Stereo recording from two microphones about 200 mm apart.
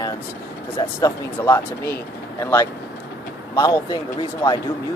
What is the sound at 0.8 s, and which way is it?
Speech, 15° left (ahead or behind).